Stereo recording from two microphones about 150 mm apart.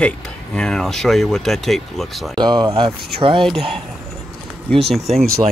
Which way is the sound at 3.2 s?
35° right (ahead or behind).